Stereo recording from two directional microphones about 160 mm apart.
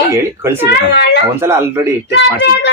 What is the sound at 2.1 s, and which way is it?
Speech, 90° left.